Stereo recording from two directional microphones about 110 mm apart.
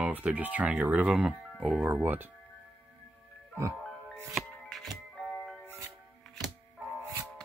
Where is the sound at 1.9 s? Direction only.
20° right (ahead or behind).